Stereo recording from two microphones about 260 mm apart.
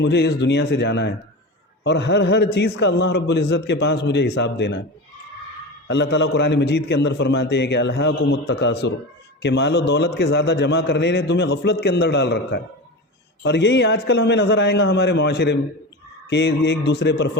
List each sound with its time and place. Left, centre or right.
0.0 s a man's voice: left
5.9 s a man's voice: left